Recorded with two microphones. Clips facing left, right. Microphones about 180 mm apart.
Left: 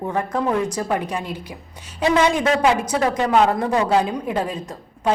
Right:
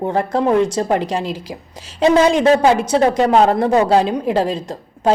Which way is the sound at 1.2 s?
90° right.